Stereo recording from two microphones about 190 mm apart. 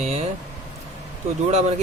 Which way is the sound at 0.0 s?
35° right (ahead or behind).